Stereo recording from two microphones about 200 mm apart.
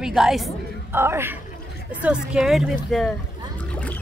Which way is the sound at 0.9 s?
10° right (ahead or behind).